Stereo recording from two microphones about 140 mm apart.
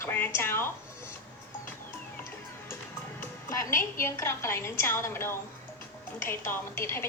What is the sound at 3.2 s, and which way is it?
Music, 20° left (ahead or behind).